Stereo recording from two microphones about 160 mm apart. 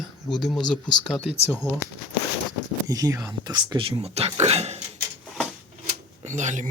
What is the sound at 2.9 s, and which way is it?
Speech, 20° right (ahead or behind).